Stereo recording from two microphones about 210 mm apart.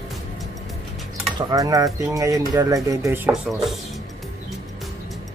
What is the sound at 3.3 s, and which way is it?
Speech, centre (ahead or behind).